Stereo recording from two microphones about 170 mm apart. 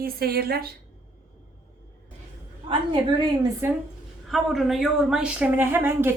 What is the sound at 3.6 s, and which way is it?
Speech, 15° right (ahead or behind).